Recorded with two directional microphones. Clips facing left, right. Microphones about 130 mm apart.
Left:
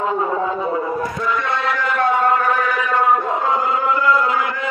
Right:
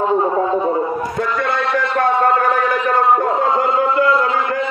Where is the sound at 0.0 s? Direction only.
30° right (ahead or behind).